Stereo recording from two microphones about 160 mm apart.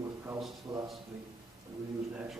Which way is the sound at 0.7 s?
25° right (ahead or behind).